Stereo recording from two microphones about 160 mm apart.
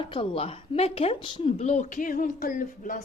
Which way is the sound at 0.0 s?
35° left (ahead or behind).